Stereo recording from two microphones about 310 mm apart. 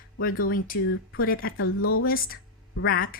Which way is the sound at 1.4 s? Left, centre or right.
Left.